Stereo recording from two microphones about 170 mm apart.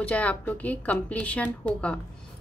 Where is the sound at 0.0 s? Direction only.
10° left (ahead or behind).